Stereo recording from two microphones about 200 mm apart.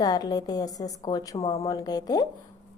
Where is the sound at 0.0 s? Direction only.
20° left (ahead or behind).